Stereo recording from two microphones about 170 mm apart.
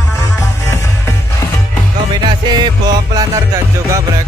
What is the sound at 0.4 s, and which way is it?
Music, 15° left (ahead or behind).